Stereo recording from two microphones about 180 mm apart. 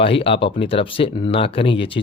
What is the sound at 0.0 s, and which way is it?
Speech, 30° left (ahead or behind).